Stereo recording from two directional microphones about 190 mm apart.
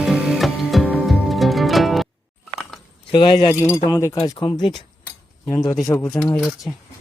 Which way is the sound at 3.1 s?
25° left (ahead or behind).